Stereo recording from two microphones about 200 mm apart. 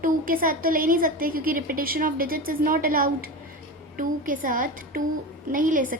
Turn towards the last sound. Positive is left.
turn(degrees=-45)  # may be behind; listen again after turning